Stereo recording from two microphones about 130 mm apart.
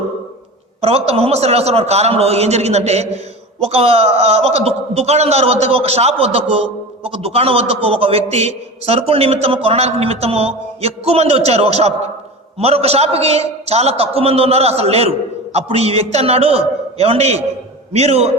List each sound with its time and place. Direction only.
0.8 s a man's voice: 50° right (ahead or behind)